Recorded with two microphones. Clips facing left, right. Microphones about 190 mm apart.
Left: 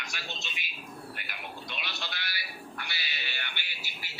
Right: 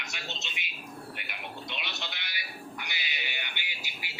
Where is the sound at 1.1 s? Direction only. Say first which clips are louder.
Right 1 dB; 20° right (ahead or behind).